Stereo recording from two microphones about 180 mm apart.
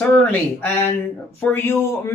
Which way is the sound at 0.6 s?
10° left (ahead or behind).